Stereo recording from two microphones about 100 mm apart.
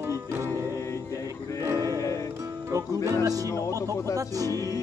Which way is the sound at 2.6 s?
30° right (ahead or behind).